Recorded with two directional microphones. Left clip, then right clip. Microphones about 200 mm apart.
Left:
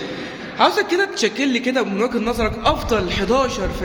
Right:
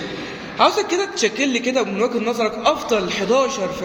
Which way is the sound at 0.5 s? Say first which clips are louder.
Even; 15° left (ahead or behind).